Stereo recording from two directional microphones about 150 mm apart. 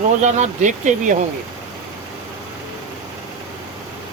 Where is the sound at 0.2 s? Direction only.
50° right (ahead or behind).